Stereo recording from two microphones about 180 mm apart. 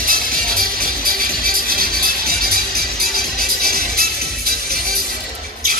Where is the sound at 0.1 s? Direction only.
55° right (ahead or behind).